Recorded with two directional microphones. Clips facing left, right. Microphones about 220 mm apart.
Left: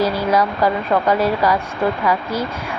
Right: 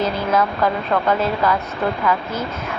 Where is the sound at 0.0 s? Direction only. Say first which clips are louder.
Left 2 dB; 10° left (ahead or behind).